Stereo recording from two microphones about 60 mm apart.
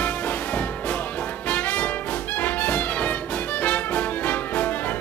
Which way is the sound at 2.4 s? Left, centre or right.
Left.